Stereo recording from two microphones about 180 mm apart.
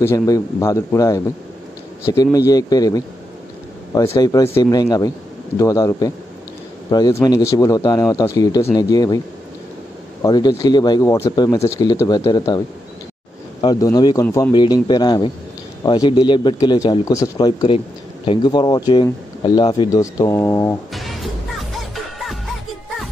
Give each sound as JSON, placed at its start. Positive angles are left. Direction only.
{"t": 0.0, "sound": "a man's voice", "side_deg": 15}
{"t": 2.3, "sound": "speech", "side_deg": 20}
{"t": 10.2, "sound": "a man's voice", "side_deg": 20}
{"t": 14.5, "sound": "speech", "side_deg": 25}
{"t": 20.9, "sound": "music", "side_deg": 0}